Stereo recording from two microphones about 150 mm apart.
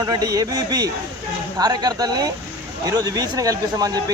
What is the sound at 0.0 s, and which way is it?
Speech, 25° right (ahead or behind).